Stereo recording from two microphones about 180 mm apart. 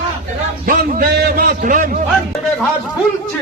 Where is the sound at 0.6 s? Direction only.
55° right (ahead or behind).